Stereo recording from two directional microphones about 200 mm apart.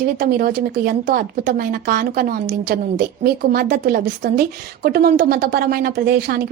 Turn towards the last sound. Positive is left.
turn(degrees=-50)  # may be behind; listen again after turning